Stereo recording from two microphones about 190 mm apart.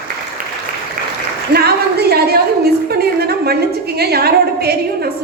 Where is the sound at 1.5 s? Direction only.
55° right (ahead or behind).